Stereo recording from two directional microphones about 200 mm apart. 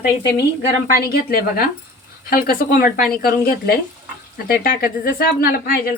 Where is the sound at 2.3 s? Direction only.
50° left (ahead or behind).